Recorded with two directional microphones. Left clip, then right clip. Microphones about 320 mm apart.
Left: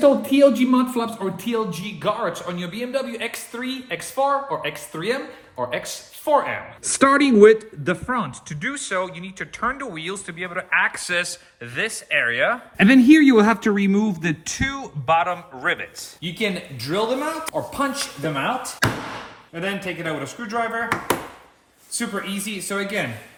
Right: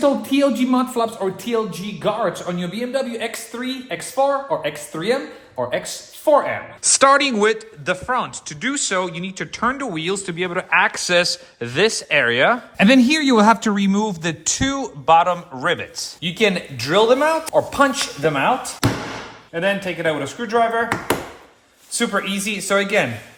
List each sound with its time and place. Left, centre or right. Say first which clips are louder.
0.0 s a woman's voice: left 3 dB; centre
19.5 s a woman's voice: right 6 dB; centre
22.4 s a woman's voice: right 8 dB; centre